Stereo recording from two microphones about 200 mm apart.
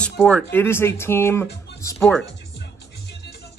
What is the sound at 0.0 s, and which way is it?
Speech, 5° left (ahead or behind).